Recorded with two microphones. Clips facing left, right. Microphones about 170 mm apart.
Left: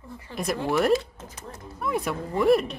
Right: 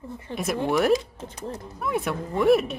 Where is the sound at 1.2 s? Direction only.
30° right (ahead or behind).